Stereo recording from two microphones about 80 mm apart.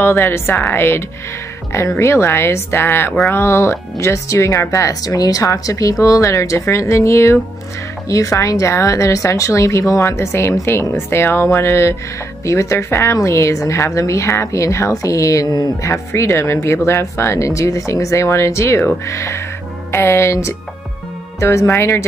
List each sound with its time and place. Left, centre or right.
0.0 s a woman's voice: left
15.8 s speech: left